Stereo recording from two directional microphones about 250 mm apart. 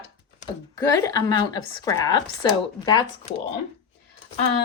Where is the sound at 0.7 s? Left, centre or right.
Centre.